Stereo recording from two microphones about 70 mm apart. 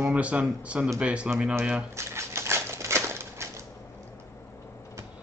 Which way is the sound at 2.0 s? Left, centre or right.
Right.